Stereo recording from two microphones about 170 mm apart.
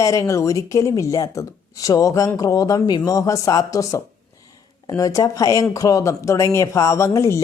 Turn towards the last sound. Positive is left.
turn(degrees=15)  # may be behind; listen again after turning